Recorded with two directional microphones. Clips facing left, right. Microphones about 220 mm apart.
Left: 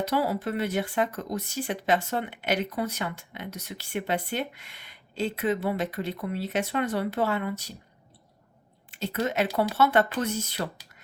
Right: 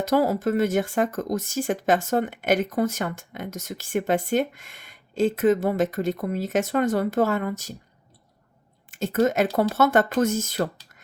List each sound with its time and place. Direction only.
0.0 s speech: 45° right (ahead or behind)
8.9 s speech: 45° right (ahead or behind)